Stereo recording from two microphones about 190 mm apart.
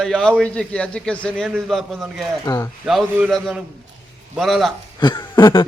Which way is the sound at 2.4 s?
15° left (ahead or behind).